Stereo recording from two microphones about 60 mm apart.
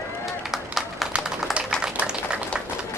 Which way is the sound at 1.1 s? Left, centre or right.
Centre.